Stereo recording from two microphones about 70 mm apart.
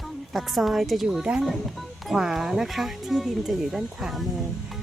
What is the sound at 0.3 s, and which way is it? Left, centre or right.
Speech, centre.